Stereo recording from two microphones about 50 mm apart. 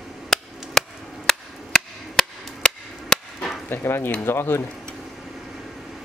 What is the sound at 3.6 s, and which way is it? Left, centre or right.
Speech, left.